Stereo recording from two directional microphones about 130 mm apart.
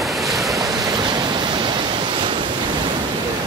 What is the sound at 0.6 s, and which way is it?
Waves, 25° right (ahead or behind).